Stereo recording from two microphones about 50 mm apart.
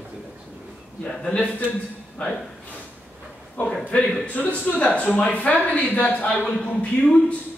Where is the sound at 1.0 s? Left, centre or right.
Centre.